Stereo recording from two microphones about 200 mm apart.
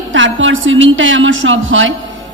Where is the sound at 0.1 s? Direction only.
70° right (ahead or behind).